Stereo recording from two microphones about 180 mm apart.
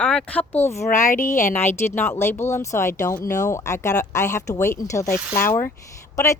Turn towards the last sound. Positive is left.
turn(degrees=15)  # may be behind; listen again after turning